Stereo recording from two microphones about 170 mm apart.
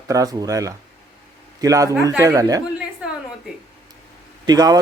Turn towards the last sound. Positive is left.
turn(degrees=-20)  # may be behind; listen again after turning